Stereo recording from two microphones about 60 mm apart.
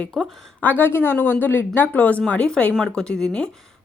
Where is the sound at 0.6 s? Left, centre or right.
Left.